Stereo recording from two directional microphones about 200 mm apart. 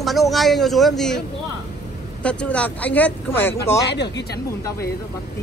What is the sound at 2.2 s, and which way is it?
Speech, 5° left (ahead or behind).